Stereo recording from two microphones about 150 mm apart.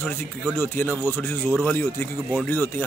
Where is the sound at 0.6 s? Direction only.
15° left (ahead or behind).